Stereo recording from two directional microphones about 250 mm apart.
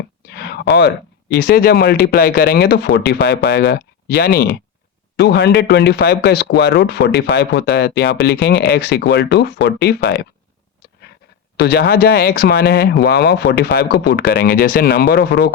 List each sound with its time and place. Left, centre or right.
0.3 s speech: left
11.5 s speech: left